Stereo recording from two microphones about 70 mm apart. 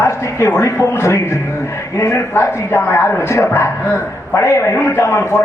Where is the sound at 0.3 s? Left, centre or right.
Left.